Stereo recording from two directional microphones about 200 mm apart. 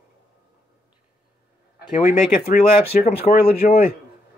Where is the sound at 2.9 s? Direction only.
40° left (ahead or behind).